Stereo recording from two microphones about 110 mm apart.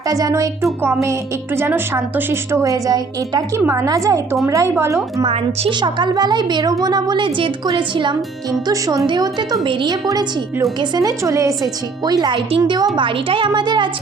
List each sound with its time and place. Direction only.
0.1 s a woman's voice: 30° right (ahead or behind)
5.2 s a woman's voice: 60° right (ahead or behind)
5.7 s a woman's voice: 45° right (ahead or behind)
9.6 s a woman's voice: 50° right (ahead or behind)
9.9 s a woman's voice: 35° right (ahead or behind)